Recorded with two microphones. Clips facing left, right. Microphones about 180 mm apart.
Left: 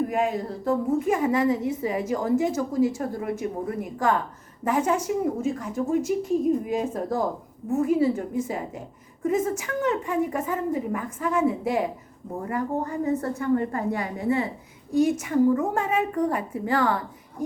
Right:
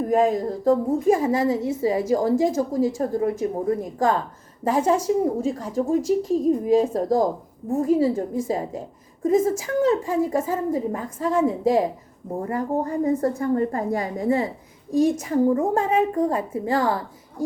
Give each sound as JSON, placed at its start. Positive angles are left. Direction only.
{"t": 0.1, "sound": "a woman's voice", "side_deg": -40}